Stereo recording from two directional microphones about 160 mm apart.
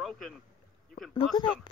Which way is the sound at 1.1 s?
25° left (ahead or behind).